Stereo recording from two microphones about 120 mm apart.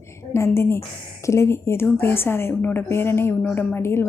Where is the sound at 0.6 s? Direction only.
20° left (ahead or behind).